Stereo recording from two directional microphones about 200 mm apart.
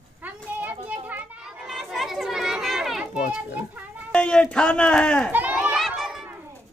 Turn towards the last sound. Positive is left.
turn(degrees=0)  # may be behind; listen again after turning